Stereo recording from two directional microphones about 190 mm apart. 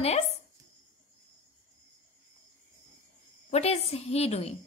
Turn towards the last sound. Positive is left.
turn(degrees=35)  # may be behind; listen again after turning